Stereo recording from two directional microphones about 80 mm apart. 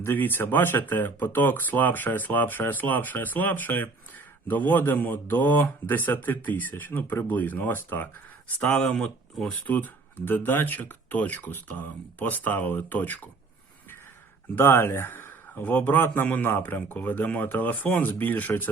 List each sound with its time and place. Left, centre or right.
0.0 s speech: left
8.8 s speech: centre
9.6 s speech: left
14.5 s speech: left